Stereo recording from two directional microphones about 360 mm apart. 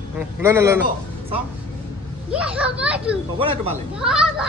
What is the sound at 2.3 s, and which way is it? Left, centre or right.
Speech, centre.